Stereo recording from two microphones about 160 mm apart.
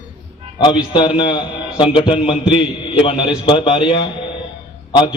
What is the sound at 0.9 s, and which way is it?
A man's voice, 30° left (ahead or behind).